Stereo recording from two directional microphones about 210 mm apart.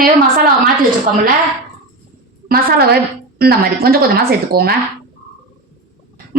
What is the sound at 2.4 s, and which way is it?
A woman's voice, 45° right (ahead or behind).